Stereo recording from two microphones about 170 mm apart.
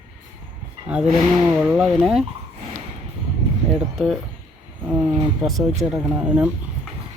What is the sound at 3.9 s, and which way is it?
Speech, centre (ahead or behind).